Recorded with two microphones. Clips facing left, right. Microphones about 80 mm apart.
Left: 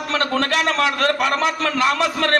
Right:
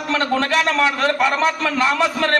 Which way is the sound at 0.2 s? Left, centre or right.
Left.